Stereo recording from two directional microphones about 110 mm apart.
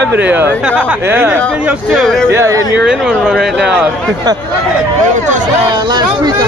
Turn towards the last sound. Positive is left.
turn(degrees=-40)  # may be behind; listen again after turning